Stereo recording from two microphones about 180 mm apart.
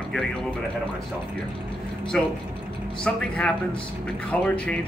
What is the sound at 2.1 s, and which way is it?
Speech, 5° left (ahead or behind).